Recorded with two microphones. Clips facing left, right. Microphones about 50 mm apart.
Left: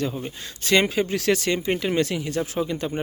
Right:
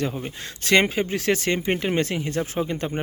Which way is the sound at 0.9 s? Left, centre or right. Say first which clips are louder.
Left 1 dB; right.